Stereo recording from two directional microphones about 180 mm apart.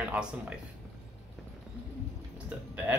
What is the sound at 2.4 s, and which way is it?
Speech, 10° right (ahead or behind).